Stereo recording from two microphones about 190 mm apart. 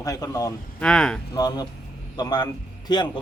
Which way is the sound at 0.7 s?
5° left (ahead or behind).